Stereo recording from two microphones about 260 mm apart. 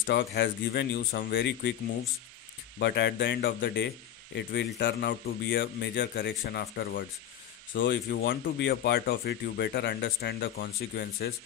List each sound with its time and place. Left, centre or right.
0.0 s speech: left
2.8 s speech: left